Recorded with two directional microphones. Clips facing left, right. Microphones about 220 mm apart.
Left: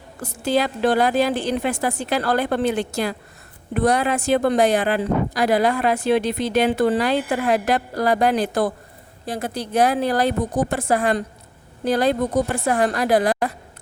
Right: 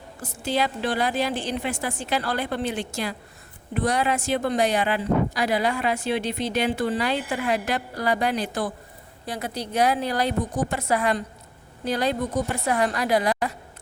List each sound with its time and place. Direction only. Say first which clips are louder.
0.2 s speech: left 5 dB; 55° left (ahead or behind)